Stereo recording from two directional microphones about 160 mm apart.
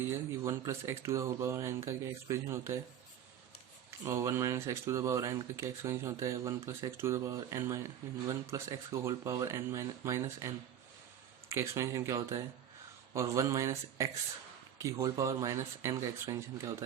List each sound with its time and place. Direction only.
0.1 s speech: 20° right (ahead or behind)
4.0 s speech: 20° right (ahead or behind)